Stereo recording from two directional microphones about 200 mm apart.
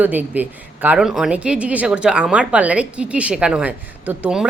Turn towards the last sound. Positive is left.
turn(degrees=-5)  # may be behind; listen again after turning